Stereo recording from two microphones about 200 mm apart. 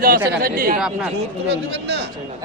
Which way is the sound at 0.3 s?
45° right (ahead or behind).